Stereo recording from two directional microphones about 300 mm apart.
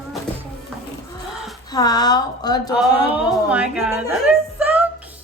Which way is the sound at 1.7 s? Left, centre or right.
Centre.